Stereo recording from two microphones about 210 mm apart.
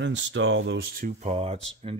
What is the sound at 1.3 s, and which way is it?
Speech, 30° right (ahead or behind).